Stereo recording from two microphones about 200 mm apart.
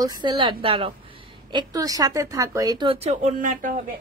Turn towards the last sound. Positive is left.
turn(degrees=-40)  # may be behind; listen again after turning